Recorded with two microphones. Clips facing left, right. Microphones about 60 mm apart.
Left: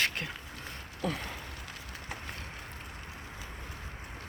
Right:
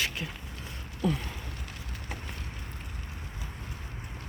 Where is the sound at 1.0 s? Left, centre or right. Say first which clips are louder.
Right 4 dB; left.